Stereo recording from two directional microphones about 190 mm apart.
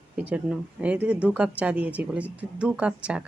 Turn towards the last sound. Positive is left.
turn(degrees=-5)  # may be behind; listen again after turning